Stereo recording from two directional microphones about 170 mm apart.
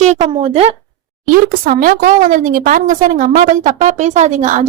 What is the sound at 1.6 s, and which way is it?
A woman's voice, 55° right (ahead or behind).